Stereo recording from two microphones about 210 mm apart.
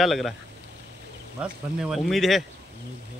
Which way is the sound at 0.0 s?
Centre (ahead or behind).